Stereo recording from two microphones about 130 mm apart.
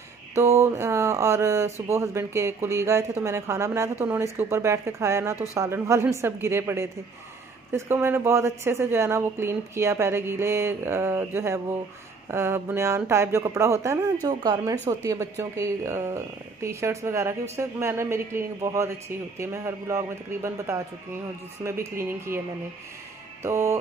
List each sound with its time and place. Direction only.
0.3 s a woman's voice: 20° right (ahead or behind)
14.2 s a woman's voice: 35° right (ahead or behind)
23.4 s a woman's voice: 20° right (ahead or behind)